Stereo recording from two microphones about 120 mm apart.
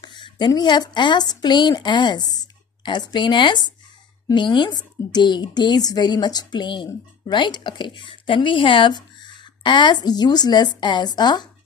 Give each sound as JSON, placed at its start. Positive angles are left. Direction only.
{"t": 0.0, "sound": "a woman's voice", "side_deg": 40}